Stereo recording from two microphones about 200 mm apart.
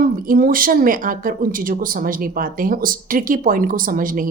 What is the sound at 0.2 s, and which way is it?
A woman's voice, 45° right (ahead or behind).